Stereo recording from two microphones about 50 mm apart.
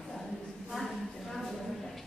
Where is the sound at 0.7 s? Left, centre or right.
Centre.